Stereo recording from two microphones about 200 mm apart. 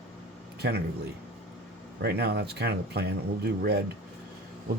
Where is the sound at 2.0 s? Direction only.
55° right (ahead or behind).